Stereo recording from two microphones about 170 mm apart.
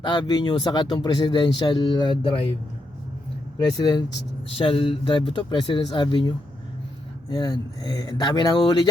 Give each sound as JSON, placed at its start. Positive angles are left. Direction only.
{"t": 0.0, "sound": "speech", "side_deg": 25}
{"t": 3.8, "sound": "speech", "side_deg": 25}